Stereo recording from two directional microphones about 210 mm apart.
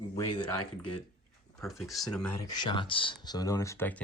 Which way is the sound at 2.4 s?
20° left (ahead or behind).